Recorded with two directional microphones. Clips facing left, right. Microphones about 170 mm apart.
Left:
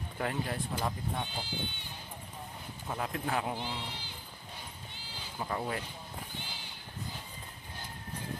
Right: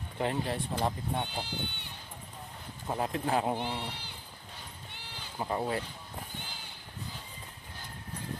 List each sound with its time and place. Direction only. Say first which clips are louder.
0.2 s speech: right 3 dB; 25° right (ahead or behind)
1.4 s speech: right 2 dB; 60° right (ahead or behind)
2.9 s speech: right 4 dB; 30° right (ahead or behind)
3.6 s speech: right 3 dB; 60° right (ahead or behind)
5.4 s speech: right 3 dB; 20° right (ahead or behind)